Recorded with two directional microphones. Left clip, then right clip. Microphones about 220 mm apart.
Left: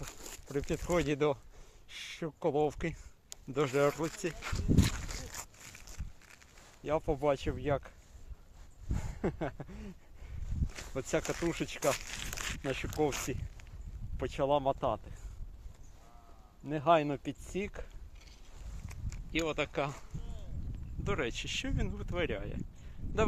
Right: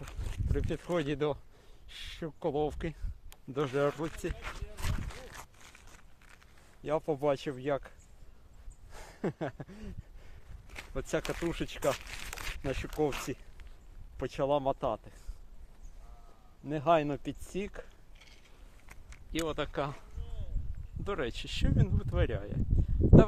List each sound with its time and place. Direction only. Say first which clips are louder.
0.0 s a sound: left 1 dB; 45° left (ahead or behind)
0.7 s speech: left 1 dB; 15° left (ahead or behind)
4.4 s a sound: left 9 dB; 35° left (ahead or behind)
6.8 s speech: right 1 dB; 5° left (ahead or behind)
13.0 s speech: right 1 dB; 10° left (ahead or behind)
14.2 s speech: even; 5° left (ahead or behind)
16.6 s speech: even; 5° left (ahead or behind)
21.0 s speech: even; centre (ahead or behind)